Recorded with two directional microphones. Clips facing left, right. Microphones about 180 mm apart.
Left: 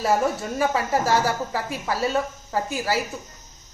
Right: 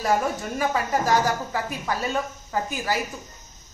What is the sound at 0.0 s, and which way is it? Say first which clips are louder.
A woman's voice: left 2 dB; 30° left (ahead or behind).